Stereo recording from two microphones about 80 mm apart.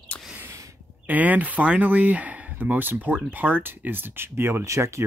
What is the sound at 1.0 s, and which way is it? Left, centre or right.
Speech, right.